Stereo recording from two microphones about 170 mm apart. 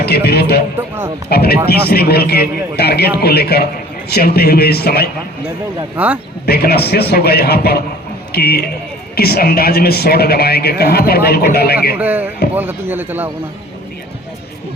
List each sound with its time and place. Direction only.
0.0 s speech: 70° left (ahead or behind)
0.8 s speech: 15° right (ahead or behind)
1.3 s speech: 65° left (ahead or behind)
6.4 s speech: 65° left (ahead or behind)
11.9 s speech: 10° right (ahead or behind)